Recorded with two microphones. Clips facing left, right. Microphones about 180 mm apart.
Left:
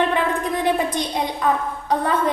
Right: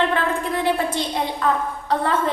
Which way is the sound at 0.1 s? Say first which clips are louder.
Left 1 dB; 15° left (ahead or behind).